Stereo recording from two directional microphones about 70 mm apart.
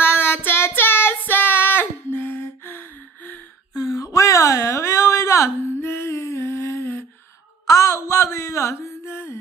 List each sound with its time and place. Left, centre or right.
0.0 s child singing: left
3.7 s a sound: left
7.6 s mantra: left